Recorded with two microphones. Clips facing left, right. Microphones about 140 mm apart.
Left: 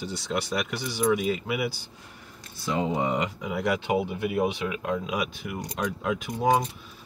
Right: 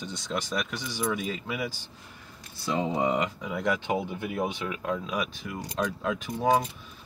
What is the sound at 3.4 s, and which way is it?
Speech, 10° left (ahead or behind).